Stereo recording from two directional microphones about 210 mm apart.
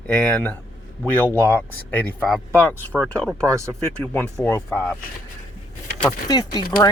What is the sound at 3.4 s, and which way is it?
Speech, 15° right (ahead or behind).